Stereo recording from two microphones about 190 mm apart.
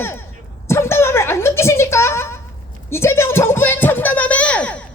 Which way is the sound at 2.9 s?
15° left (ahead or behind).